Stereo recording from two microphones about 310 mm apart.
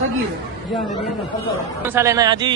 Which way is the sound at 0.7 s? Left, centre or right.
Centre.